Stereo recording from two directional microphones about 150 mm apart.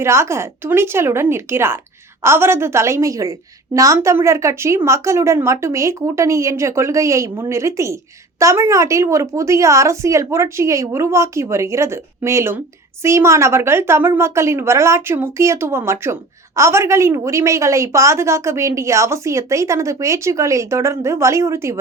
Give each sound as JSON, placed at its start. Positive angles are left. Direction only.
{"t": 0.0, "sound": "a woman's voice", "side_deg": -20}